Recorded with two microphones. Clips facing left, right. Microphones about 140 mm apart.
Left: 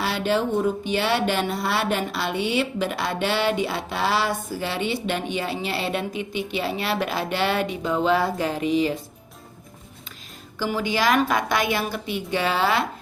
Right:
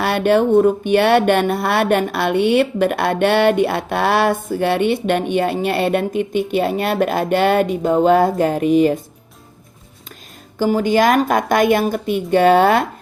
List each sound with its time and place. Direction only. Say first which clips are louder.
0.0 s speech: right 8 dB; 60° right (ahead or behind)
10.6 s speech: right 9 dB; 45° right (ahead or behind)